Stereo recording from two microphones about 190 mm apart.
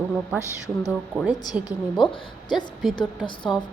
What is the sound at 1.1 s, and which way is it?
Speech, 5° right (ahead or behind).